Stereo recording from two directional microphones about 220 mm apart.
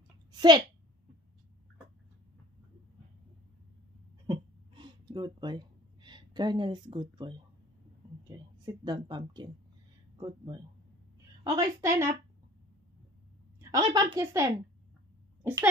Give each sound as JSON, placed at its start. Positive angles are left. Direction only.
{"t": 0.3, "sound": "speech", "side_deg": -20}
{"t": 4.3, "sound": "a sound", "side_deg": -20}
{"t": 8.3, "sound": "a woman's voice", "side_deg": -20}
{"t": 13.6, "sound": "a woman's voice", "side_deg": -15}